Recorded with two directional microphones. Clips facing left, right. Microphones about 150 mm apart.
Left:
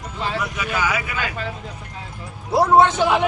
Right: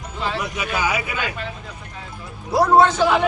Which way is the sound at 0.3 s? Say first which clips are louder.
Left 2 dB; 20° right (ahead or behind).